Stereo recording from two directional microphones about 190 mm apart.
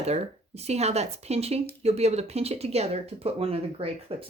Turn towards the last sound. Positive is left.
turn(degrees=-30)  # may be behind; listen again after turning